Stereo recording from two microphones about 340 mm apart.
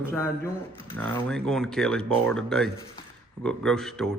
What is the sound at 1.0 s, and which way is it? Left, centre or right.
Speech, centre.